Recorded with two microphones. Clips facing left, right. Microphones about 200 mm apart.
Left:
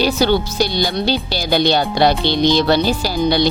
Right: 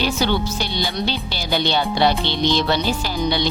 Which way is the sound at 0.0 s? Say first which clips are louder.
Left 5 dB; 35° left (ahead or behind).